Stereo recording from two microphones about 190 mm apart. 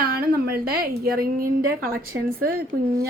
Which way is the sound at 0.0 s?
50° right (ahead or behind).